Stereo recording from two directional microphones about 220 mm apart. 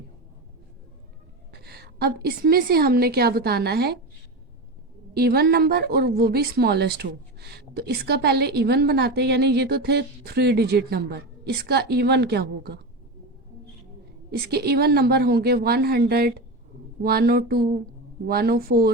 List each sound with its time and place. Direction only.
1.5 s a woman's voice: 45° right (ahead or behind)
5.1 s a woman's voice: 45° right (ahead or behind)
14.3 s a woman's voice: 45° right (ahead or behind)